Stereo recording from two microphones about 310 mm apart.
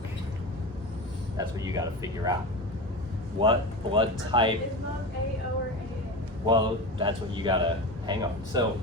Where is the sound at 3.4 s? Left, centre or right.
Centre.